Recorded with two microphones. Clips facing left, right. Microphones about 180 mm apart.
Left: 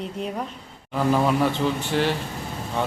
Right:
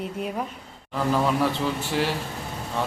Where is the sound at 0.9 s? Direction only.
5° left (ahead or behind).